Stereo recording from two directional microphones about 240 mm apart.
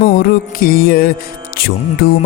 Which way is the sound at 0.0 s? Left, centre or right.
Left.